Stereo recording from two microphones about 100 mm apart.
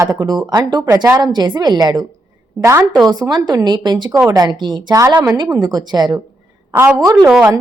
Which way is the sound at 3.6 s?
50° right (ahead or behind).